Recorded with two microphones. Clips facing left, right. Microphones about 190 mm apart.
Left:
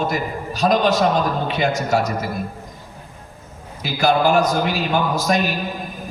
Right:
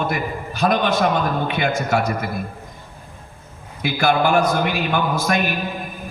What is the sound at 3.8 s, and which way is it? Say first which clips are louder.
A man's voice: left 1 dB; 55° right (ahead or behind).